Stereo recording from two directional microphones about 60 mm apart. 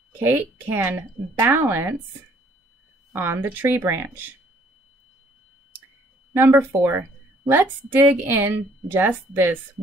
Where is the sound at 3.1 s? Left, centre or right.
Right.